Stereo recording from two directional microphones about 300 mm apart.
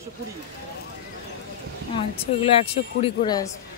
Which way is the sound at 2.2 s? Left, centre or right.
Centre.